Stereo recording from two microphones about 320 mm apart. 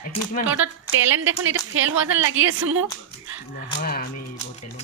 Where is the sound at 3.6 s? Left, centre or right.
Left.